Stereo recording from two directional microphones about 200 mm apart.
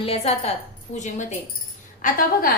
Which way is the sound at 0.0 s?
30° left (ahead or behind).